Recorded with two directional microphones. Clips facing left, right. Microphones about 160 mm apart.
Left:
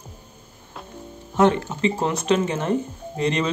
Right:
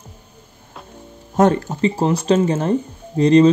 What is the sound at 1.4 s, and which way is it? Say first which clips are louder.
Speech: right 3 dB; 40° right (ahead or behind).